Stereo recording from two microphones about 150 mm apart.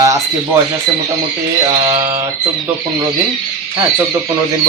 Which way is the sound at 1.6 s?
20° right (ahead or behind).